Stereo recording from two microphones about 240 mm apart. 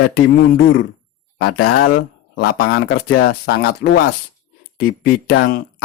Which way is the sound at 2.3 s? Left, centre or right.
Left.